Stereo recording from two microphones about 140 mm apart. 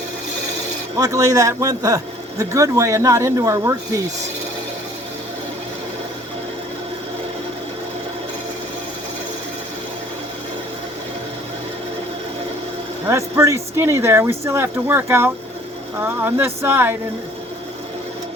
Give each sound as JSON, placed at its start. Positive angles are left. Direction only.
{"t": 0.9, "sound": "speech", "side_deg": -25}
{"t": 13.1, "sound": "speech", "side_deg": -20}